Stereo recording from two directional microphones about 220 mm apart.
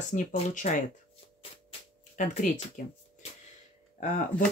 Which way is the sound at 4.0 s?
35° left (ahead or behind).